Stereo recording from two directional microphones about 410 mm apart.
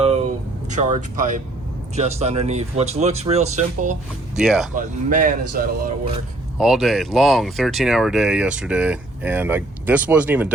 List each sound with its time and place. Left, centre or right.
0.7 s speech: centre
4.4 s speech: centre
4.7 s speech: centre
6.6 s speech: centre